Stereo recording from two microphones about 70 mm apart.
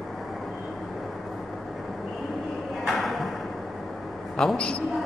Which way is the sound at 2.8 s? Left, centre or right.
Centre.